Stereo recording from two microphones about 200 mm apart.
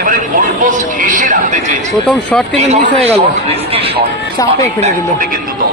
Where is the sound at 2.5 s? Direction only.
30° right (ahead or behind).